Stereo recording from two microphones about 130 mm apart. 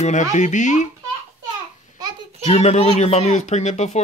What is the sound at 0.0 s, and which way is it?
Speech, 65° left (ahead or behind).